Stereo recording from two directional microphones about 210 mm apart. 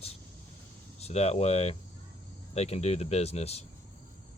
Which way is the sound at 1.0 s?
30° left (ahead or behind).